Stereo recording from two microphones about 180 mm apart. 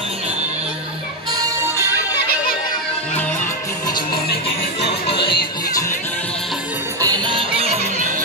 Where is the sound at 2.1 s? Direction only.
60° left (ahead or behind).